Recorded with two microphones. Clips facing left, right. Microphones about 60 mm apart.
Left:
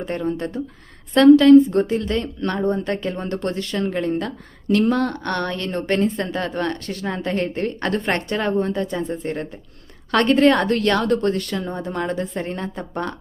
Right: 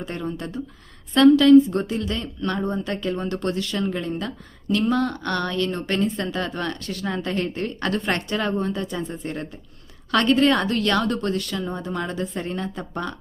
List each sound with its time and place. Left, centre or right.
0.0 s a woman's voice: left
10.1 s a woman's voice: left